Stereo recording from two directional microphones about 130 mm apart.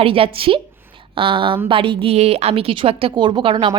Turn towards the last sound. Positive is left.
turn(degrees=-40)  # may be behind; listen again after turning